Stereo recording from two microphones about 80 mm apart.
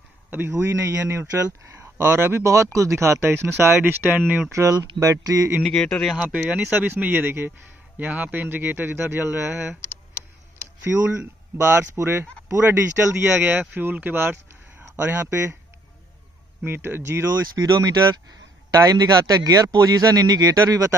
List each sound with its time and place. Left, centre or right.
0.3 s a man's voice: right
4.5 s a man's voice: right
5.0 s a man's voice: right
5.6 s speech: centre
6.2 s speech: centre
10.8 s a man's voice: right
16.6 s speech: right
17.4 s a man's voice: right